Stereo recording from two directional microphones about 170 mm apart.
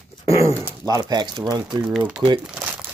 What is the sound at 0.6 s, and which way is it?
Speech, 20° right (ahead or behind).